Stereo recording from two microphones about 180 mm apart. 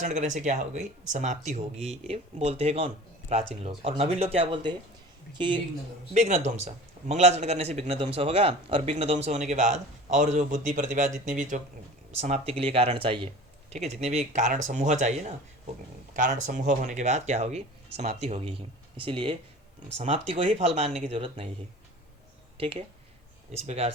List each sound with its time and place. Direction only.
0.0 s a man's voice: 40° right (ahead or behind); by 5.5 s 25° right (ahead or behind)
6.1 s a man's voice: 40° right (ahead or behind)
22.5 s a man's voice: 30° right (ahead or behind)